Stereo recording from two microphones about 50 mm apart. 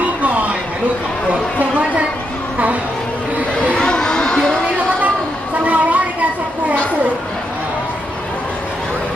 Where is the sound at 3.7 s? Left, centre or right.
Centre.